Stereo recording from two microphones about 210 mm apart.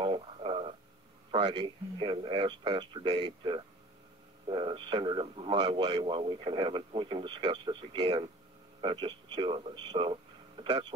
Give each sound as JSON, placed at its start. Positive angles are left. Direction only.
{"t": 0.0, "sound": "radio", "side_deg": -25}
{"t": 1.3, "sound": "speech", "side_deg": -20}